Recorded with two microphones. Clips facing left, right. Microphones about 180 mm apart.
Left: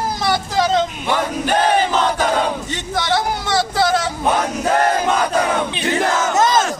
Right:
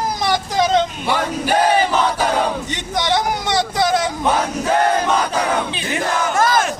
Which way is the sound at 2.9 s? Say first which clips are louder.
Right 1 dB; 15° right (ahead or behind).